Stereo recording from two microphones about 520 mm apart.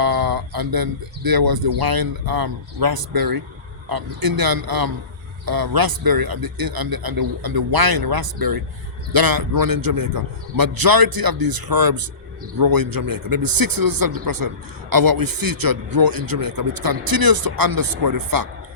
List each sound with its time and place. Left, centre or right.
0.0 s speech: right